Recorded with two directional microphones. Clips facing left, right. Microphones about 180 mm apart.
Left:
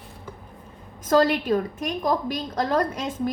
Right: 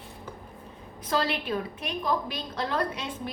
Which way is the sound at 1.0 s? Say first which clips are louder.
Left 9 dB; 45° left (ahead or behind).